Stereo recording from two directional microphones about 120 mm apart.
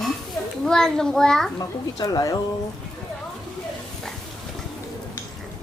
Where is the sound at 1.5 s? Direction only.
35° left (ahead or behind).